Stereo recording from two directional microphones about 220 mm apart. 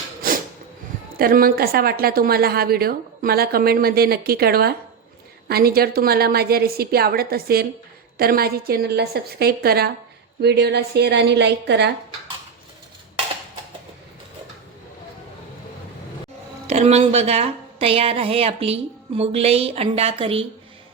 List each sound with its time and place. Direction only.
0.2 s a sound: 40° right (ahead or behind)
1.1 s a woman's voice: 40° right (ahead or behind)
16.6 s a woman's voice: 30° right (ahead or behind)